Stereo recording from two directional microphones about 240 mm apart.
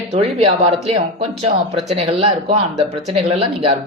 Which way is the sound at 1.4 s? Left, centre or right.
Right.